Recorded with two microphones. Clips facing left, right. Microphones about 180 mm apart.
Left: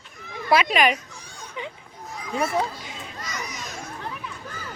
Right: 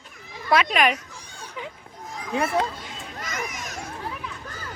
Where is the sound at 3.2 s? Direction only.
50° right (ahead or behind).